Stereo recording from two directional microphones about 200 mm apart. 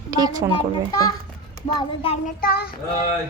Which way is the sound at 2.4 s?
50° left (ahead or behind).